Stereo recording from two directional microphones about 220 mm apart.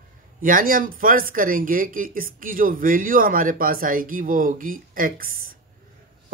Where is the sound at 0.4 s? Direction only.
40° right (ahead or behind).